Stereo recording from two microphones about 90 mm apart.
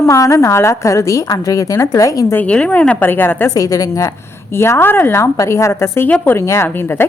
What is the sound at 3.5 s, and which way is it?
A woman's voice, 40° left (ahead or behind).